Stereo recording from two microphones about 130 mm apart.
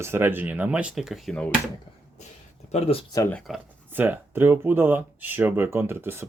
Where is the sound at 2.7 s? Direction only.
55° left (ahead or behind).